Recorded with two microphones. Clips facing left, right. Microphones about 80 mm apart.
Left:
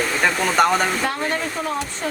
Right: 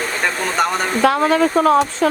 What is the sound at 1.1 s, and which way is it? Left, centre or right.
Speech, right.